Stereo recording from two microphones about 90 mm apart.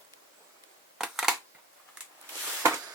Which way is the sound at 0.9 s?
5° right (ahead or behind).